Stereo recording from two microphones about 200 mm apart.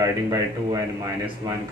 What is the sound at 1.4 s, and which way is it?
Speech, 20° right (ahead or behind).